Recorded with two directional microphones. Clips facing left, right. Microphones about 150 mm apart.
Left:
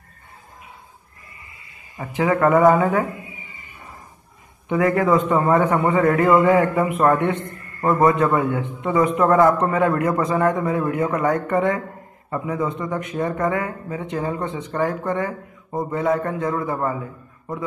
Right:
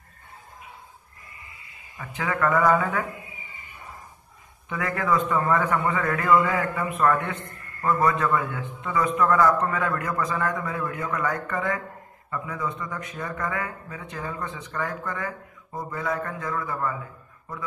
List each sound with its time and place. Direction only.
2.0 s speech: 30° left (ahead or behind)
4.6 s a man's voice: 25° left (ahead or behind)